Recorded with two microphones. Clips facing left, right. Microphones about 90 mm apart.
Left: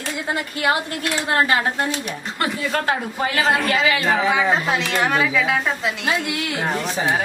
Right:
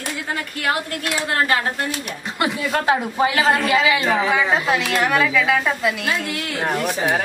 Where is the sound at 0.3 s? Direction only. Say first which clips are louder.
Left 3 dB; 20° left (ahead or behind).